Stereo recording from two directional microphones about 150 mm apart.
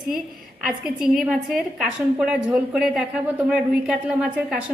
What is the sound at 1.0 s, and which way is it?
A woman's voice, centre (ahead or behind).